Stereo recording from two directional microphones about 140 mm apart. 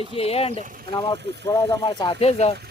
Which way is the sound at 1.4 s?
20° left (ahead or behind).